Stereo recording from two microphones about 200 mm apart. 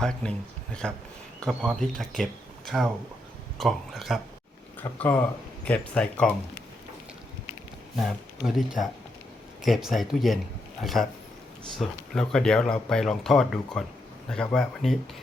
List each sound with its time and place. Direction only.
0.0 s speech: 5° left (ahead or behind)
7.9 s speech: centre (ahead or behind)